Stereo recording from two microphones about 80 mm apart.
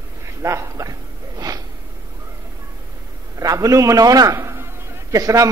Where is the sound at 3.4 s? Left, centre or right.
Right.